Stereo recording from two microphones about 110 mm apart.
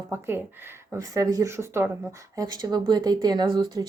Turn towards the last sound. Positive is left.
turn(degrees=-40)  # may be behind; listen again after turning